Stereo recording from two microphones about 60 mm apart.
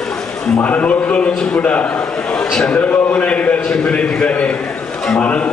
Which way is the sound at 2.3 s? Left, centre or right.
Centre.